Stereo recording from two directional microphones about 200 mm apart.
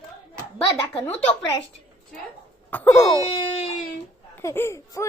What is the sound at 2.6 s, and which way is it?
Wail, 10° left (ahead or behind).